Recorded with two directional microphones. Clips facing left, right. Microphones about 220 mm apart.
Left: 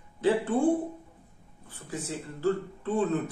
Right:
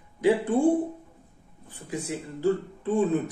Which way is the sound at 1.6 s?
15° right (ahead or behind).